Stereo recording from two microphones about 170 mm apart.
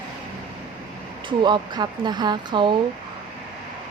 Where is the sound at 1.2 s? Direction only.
25° right (ahead or behind).